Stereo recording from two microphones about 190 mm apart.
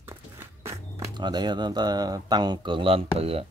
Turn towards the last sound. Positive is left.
turn(degrees=-30)  # may be behind; listen again after turning